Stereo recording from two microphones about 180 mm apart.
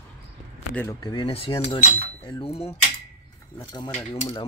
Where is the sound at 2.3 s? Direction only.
30° left (ahead or behind).